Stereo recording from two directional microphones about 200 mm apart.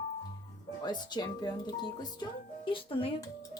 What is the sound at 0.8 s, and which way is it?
Speech, 20° left (ahead or behind).